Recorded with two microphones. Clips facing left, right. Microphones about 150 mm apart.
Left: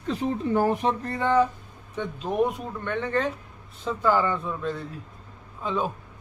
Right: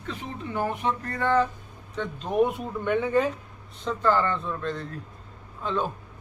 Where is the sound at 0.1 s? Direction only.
35° left (ahead or behind).